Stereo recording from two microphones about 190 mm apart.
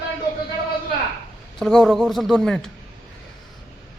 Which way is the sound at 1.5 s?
Centre (ahead or behind).